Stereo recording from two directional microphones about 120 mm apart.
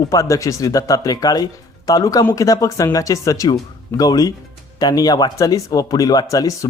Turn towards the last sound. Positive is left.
turn(degrees=30)  # may be behind; listen again after turning